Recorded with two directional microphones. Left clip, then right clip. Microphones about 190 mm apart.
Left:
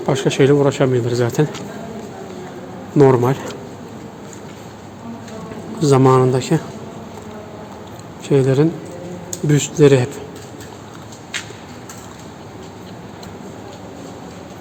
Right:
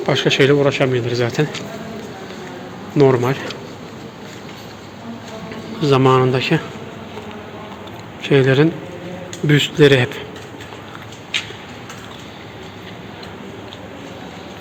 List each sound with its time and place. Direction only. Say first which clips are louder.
0.0 s speech: right 1 dB; 20° left (ahead or behind)
3.1 s speech: left 1 dB; 20° left (ahead or behind)
5.8 s speech: left 1 dB; 30° left (ahead or behind)
8.2 s speech: right 1 dB; 15° left (ahead or behind)